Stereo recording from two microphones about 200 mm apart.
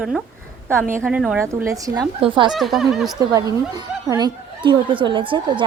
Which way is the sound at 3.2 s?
20° right (ahead or behind).